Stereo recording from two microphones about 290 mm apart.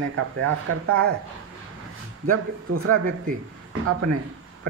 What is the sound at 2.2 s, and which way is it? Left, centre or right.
Speech, right.